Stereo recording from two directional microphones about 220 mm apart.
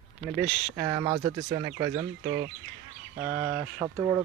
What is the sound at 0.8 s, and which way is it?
Speech, 20° right (ahead or behind).